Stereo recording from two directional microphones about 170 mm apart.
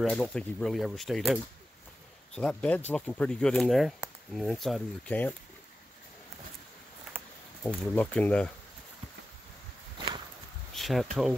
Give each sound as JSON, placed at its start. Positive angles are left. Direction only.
{"t": 0.0, "sound": "speech", "side_deg": 5}
{"t": 7.6, "sound": "speech", "side_deg": 10}
{"t": 9.9, "sound": "walk", "side_deg": -30}
{"t": 10.7, "sound": "a sound", "side_deg": 0}